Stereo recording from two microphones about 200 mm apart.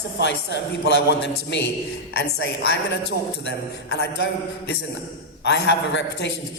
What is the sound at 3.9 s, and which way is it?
Speech, 55° left (ahead or behind).